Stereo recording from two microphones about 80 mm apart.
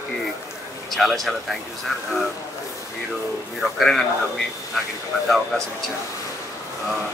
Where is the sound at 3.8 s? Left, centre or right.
Centre.